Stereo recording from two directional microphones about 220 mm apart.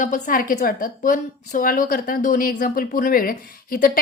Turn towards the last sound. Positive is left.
turn(degrees=40)  # may be behind; listen again after turning